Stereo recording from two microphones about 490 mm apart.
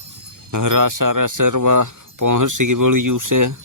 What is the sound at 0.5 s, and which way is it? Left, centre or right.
Speech, right.